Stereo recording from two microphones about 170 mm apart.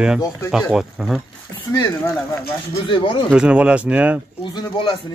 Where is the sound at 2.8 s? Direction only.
30° left (ahead or behind).